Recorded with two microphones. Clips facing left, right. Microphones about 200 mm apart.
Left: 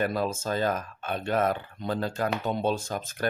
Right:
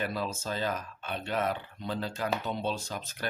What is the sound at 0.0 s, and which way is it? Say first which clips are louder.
Speech: left 6 dB; 50° left (ahead or behind).